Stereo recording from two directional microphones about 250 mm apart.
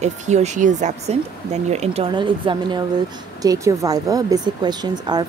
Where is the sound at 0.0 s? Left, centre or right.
Right.